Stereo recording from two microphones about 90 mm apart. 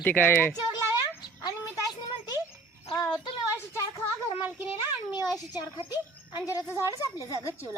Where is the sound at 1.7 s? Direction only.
45° left (ahead or behind).